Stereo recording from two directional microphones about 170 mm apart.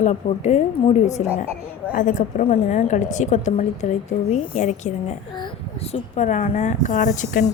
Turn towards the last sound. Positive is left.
turn(degrees=45)  # may be behind; listen again after turning